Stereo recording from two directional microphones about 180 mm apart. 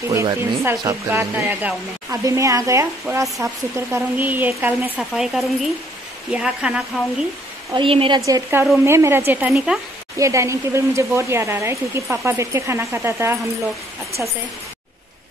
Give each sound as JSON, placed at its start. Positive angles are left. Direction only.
{"t": 0.1, "sound": "a woman's voice", "side_deg": -15}
{"t": 7.7, "sound": "a woman's voice", "side_deg": -30}
{"t": 8.3, "sound": "speech", "side_deg": -15}
{"t": 10.1, "sound": "speech", "side_deg": -15}